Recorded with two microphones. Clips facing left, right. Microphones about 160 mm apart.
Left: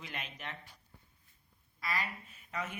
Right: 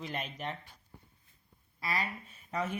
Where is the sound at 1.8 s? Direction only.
30° right (ahead or behind).